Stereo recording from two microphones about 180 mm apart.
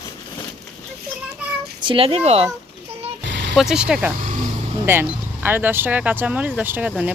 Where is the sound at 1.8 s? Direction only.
30° right (ahead or behind).